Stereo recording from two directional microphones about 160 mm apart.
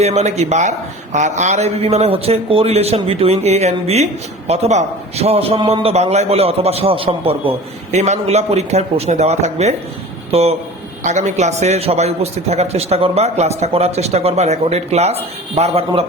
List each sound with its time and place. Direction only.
0.0 s a man's voice: 45° right (ahead or behind)
7.9 s a man's voice: 45° right (ahead or behind)